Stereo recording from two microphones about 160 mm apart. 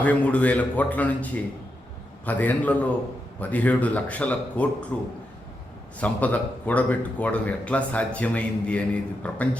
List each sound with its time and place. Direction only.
0.0 s a man's voice: 10° left (ahead or behind)